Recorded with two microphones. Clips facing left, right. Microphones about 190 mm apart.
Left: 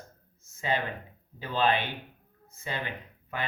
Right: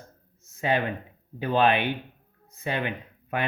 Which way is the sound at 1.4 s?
60° right (ahead or behind).